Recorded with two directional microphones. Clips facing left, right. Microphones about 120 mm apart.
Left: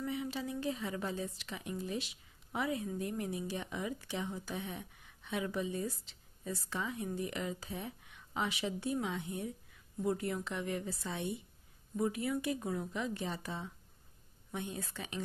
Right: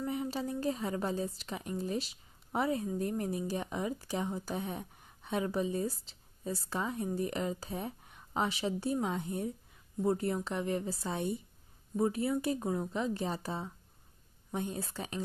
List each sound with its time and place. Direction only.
0.0 s a woman's voice: 40° right (ahead or behind)